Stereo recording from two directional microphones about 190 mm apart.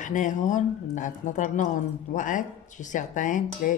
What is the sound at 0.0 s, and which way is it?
Speech, 40° left (ahead or behind).